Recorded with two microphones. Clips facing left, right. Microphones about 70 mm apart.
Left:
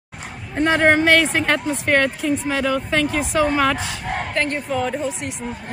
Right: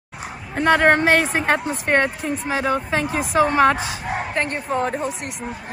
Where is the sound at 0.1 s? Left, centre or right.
Centre.